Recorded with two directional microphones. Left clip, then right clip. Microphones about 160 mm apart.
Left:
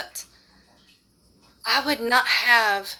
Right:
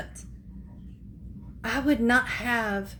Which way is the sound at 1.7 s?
15° right (ahead or behind).